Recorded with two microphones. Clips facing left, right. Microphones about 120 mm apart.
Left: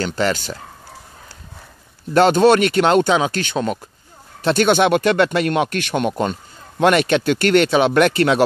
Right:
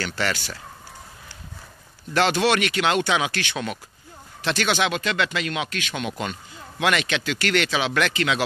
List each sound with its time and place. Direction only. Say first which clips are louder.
2.1 s speech: left 8 dB; 45° left (ahead or behind)
4.5 s speech: left 9 dB; 50° left (ahead or behind)